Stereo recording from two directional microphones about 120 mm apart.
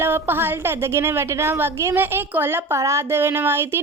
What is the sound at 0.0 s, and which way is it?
A woman's voice, 20° right (ahead or behind).